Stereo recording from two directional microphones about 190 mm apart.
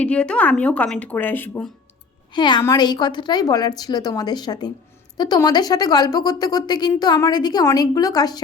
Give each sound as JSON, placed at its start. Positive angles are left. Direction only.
{"t": 0.0, "sound": "a woman's voice", "side_deg": 5}
{"t": 2.3, "sound": "speech", "side_deg": 25}